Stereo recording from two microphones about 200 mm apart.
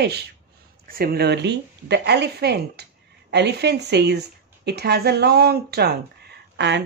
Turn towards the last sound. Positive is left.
turn(degrees=-60)  # may be behind; listen again after turning